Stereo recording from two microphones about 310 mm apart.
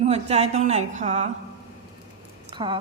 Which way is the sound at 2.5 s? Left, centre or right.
Centre.